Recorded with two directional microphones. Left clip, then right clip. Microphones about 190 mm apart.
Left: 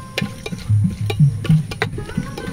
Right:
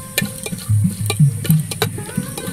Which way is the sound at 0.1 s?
5° left (ahead or behind).